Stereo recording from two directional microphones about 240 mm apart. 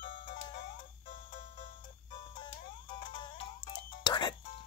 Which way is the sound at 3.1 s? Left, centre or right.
Centre.